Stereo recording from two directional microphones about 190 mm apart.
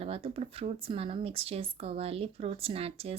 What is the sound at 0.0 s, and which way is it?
Speech, 30° right (ahead or behind).